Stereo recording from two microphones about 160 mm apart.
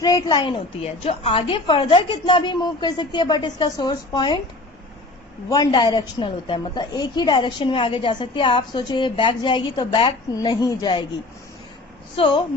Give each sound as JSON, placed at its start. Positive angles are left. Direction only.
{"t": 0.0, "sound": "a woman's voice", "side_deg": 25}
{"t": 5.5, "sound": "a woman's voice", "side_deg": 25}
{"t": 12.1, "sound": "speech", "side_deg": 35}